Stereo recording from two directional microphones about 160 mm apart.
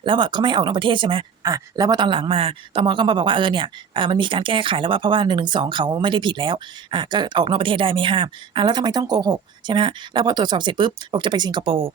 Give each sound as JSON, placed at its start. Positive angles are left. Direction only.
{"t": 0.0, "sound": "speech", "side_deg": -30}